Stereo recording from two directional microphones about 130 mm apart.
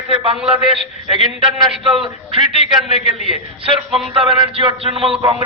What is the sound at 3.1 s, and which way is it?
Speech, 60° left (ahead or behind).